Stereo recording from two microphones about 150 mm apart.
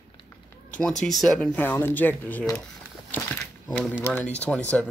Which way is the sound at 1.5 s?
15° left (ahead or behind).